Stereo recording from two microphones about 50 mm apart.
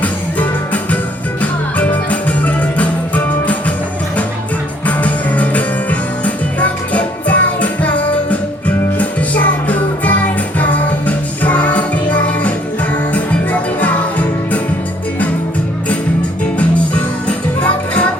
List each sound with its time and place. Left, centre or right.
0.0 s music: left
4.9 s music: left
17.2 s music: left